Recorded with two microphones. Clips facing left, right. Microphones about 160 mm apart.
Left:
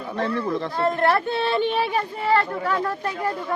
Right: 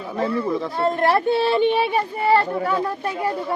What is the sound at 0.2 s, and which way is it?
Speech, 5° right (ahead or behind).